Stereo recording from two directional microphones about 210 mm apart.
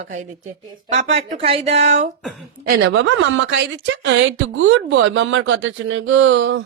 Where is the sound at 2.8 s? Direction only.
60° right (ahead or behind).